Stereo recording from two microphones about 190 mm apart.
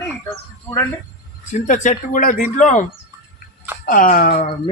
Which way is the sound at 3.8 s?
50° left (ahead or behind).